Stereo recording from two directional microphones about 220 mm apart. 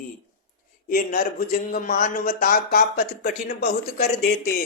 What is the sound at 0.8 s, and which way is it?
Speech, 40° left (ahead or behind).